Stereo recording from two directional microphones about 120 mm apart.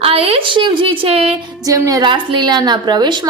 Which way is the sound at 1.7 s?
35° right (ahead or behind).